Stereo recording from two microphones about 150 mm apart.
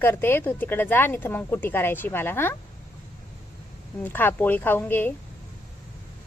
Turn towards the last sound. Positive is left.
turn(degrees=15)  # may be behind; listen again after turning